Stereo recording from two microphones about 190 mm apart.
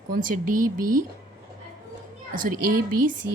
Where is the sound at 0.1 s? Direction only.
45° right (ahead or behind).